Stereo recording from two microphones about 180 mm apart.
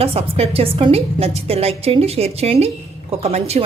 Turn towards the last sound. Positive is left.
turn(degrees=-35)  # may be behind; listen again after turning